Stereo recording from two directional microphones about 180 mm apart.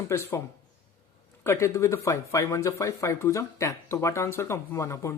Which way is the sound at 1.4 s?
15° left (ahead or behind).